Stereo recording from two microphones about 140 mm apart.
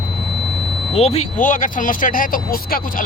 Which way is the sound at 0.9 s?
45° left (ahead or behind).